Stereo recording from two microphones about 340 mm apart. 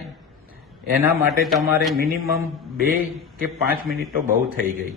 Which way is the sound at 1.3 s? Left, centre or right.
Centre.